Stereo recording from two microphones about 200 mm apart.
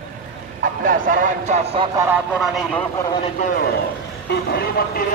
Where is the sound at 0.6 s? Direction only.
45° right (ahead or behind).